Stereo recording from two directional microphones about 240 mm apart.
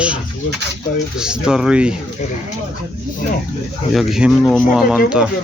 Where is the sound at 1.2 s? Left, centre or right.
Centre.